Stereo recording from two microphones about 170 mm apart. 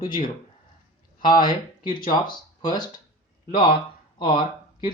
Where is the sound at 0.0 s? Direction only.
30° left (ahead or behind).